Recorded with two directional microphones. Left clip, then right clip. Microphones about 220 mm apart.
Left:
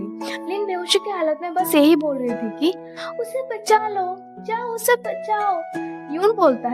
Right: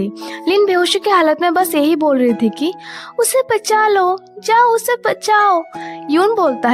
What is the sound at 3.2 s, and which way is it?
Speech, 45° right (ahead or behind).